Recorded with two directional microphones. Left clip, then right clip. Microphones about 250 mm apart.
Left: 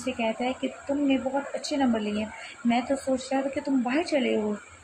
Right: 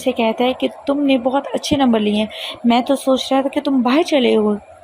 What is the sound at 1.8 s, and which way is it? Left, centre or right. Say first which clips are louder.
Speech: right 10 dB; right.